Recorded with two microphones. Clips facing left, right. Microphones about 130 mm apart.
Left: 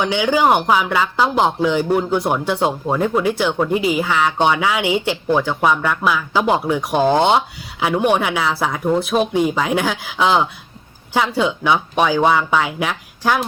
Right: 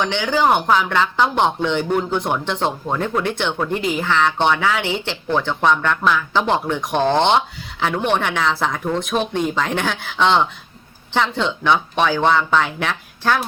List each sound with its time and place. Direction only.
0.0 s speech: 10° left (ahead or behind)